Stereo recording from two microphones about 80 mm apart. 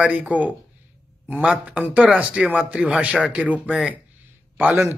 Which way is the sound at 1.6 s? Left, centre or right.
Centre.